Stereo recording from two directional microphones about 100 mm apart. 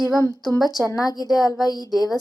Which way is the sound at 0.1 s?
35° left (ahead or behind).